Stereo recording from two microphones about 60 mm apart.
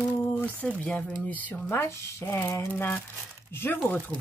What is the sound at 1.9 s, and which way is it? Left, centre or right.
Speech, left.